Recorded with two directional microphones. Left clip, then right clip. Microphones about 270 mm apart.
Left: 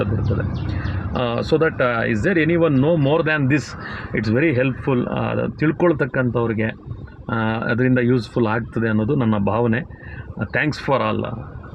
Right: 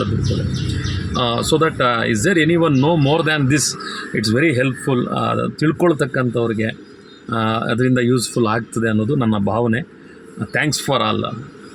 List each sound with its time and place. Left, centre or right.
1.1 s speech: centre